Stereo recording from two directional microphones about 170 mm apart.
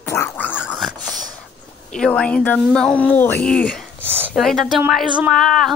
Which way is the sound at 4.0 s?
10° right (ahead or behind).